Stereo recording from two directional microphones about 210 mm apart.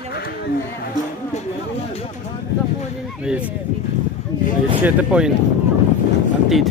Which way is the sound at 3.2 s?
5° right (ahead or behind).